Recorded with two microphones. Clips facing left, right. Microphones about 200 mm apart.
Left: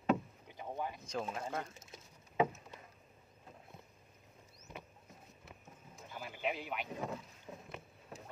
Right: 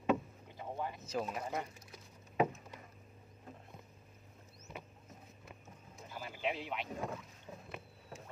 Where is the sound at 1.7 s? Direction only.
25° left (ahead or behind).